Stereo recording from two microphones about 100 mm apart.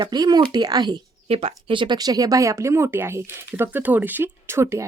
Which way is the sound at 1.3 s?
80° right.